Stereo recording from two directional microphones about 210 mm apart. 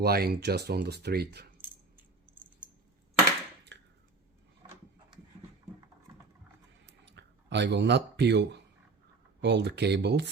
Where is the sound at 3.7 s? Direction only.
55° right (ahead or behind).